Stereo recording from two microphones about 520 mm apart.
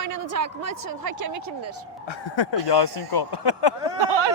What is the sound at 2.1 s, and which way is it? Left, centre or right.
Speech, left.